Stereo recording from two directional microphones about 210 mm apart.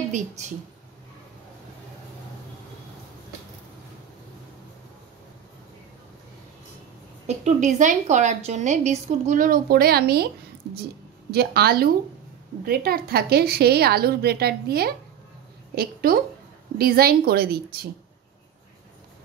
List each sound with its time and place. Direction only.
7.2 s a woman's voice: 35° right (ahead or behind)